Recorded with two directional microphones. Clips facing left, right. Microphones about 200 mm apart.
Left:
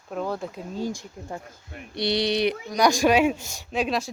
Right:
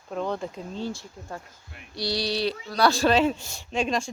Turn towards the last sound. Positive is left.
turn(degrees=5)  # may be behind; listen again after turning